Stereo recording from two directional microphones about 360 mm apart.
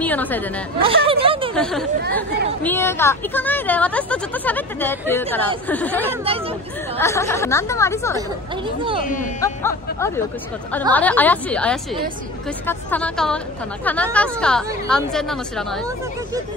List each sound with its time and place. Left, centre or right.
0.0 s a woman's voice: centre
0.7 s speech: centre
1.5 s a woman's voice: centre
6.2 s speech: centre
7.0 s speech: centre
9.0 s speech: left
9.4 s a woman's voice: centre